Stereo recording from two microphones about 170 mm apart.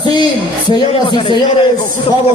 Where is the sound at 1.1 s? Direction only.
30° left (ahead or behind).